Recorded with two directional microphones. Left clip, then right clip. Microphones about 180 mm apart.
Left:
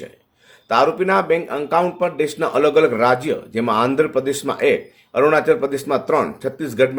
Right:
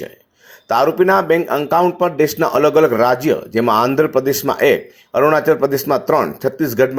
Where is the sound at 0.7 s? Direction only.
30° right (ahead or behind).